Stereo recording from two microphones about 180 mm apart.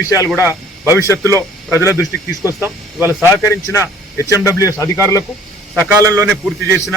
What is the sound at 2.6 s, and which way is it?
Speech, 10° right (ahead or behind).